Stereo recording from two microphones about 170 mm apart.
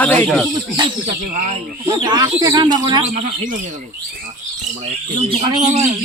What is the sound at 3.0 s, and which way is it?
Speech, 45° right (ahead or behind).